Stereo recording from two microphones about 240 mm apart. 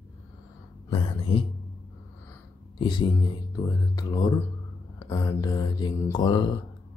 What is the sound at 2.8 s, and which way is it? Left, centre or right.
Speech, centre.